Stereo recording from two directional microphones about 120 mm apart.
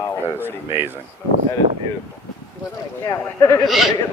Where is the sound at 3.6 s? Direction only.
Centre (ahead or behind).